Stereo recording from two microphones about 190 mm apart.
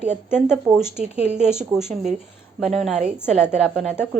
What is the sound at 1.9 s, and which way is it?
Speech, 40° right (ahead or behind).